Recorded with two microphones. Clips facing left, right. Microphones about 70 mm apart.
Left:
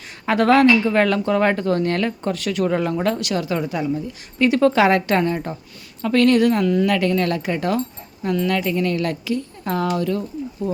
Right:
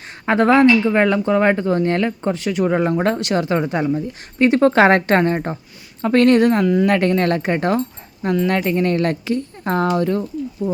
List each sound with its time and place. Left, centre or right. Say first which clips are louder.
0.3 s speech: right 2 dB; right
10.6 s speech: right 2 dB; centre